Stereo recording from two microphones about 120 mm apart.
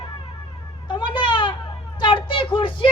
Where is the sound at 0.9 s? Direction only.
40° left (ahead or behind).